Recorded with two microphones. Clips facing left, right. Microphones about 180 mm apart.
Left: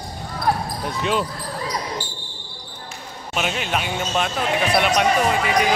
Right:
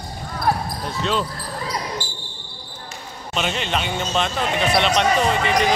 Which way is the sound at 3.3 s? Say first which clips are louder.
Even; 5° left (ahead or behind).